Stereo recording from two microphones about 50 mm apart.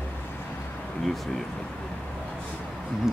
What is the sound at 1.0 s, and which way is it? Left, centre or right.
Speech, centre.